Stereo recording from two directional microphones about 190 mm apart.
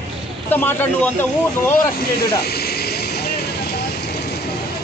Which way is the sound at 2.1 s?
55° left (ahead or behind).